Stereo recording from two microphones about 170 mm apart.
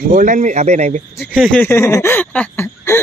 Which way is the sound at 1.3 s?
5° left (ahead or behind).